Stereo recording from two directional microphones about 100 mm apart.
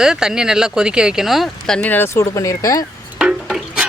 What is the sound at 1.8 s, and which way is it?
Speech, 20° left (ahead or behind).